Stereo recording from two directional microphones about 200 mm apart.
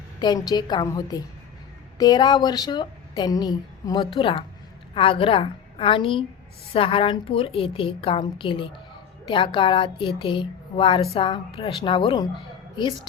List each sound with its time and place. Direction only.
0.2 s speech: 20° left (ahead or behind)